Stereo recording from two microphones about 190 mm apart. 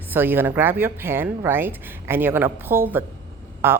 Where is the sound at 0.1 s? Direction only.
10° right (ahead or behind).